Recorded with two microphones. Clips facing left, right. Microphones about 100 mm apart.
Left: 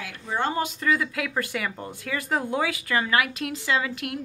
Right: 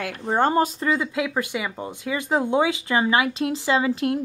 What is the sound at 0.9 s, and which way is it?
A woman's voice, 25° right (ahead or behind).